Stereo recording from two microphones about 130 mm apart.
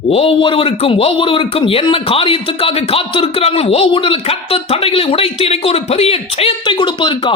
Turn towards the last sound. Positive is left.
turn(degrees=40)  # may be behind; listen again after turning